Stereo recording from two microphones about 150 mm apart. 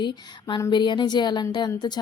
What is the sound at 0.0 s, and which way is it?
A woman's voice, 30° left (ahead or behind).